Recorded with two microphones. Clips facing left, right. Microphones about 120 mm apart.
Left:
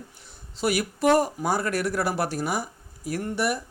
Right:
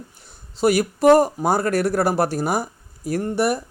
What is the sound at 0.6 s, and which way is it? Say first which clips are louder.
Speech: right 7 dB; 40° right (ahead or behind).